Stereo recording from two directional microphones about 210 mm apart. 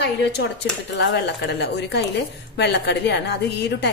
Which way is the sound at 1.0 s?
55° left (ahead or behind).